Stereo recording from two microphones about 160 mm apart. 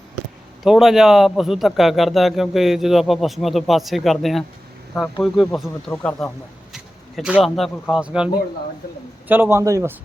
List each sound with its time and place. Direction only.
0.6 s a man's voice: centre (ahead or behind)
6.7 s a man's voice: 5° right (ahead or behind)